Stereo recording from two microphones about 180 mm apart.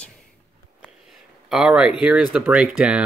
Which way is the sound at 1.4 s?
5° right (ahead or behind).